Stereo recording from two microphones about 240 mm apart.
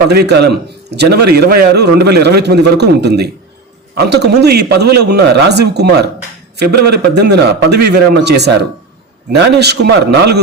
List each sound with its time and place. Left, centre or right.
0.1 s a man's voice: right